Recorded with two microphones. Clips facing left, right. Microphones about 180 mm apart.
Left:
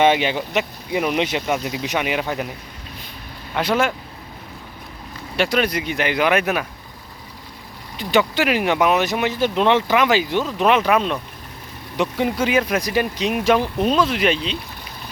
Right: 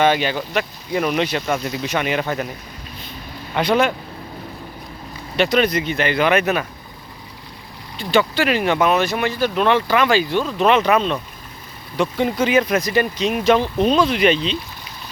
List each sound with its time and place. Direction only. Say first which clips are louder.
0.0 s speech: left 1 dB; 20° left (ahead or behind); by 2.5 s 5° left (ahead or behind)
3.5 s speech: right 2 dB; 5° left (ahead or behind)
5.4 s speech: right 3 dB; 10° left (ahead or behind)
7.9 s speech: right 1 dB; 15° left (ahead or behind)